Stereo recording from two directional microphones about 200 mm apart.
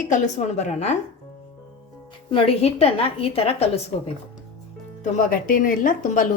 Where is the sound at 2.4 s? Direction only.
30° left (ahead or behind).